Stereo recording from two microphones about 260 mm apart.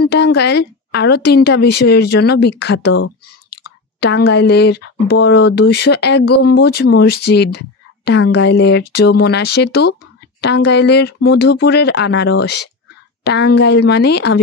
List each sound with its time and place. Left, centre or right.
0.0 s speech: left